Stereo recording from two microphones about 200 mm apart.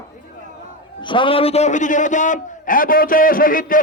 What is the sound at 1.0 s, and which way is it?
A man's voice, 25° left (ahead or behind).